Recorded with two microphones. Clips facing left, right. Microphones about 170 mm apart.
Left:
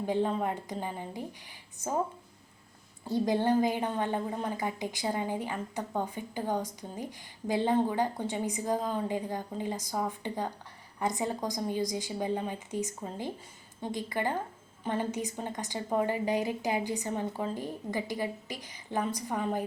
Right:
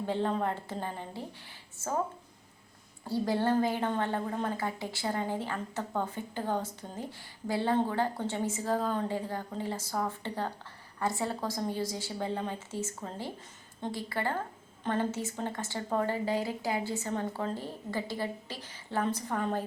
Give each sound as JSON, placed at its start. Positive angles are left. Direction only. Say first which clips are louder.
{"t": 0.0, "sound": "a woman's voice", "louder": "left 1 dB", "side_deg": 15}
{"t": 3.1, "sound": "a woman's voice", "louder": "left 2 dB", "side_deg": 20}